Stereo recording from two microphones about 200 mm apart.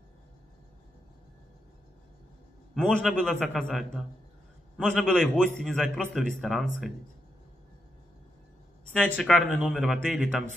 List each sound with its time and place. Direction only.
2.7 s a man's voice: centre (ahead or behind)
8.9 s a man's voice: 5° left (ahead or behind)